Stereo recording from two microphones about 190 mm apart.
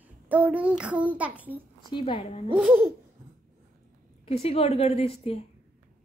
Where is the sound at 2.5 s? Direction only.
5° right (ahead or behind).